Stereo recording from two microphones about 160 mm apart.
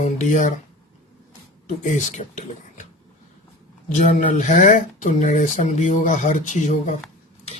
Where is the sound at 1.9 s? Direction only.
50° left (ahead or behind).